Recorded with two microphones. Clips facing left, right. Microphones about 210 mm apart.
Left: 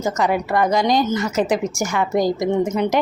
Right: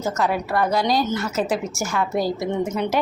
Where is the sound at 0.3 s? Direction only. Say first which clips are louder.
Left 4 dB; 15° left (ahead or behind).